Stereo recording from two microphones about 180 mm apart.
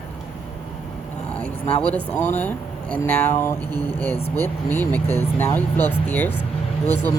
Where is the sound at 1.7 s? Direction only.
10° left (ahead or behind).